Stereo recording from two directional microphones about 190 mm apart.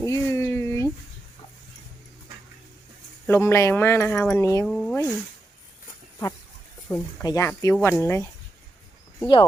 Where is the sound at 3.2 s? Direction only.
15° left (ahead or behind).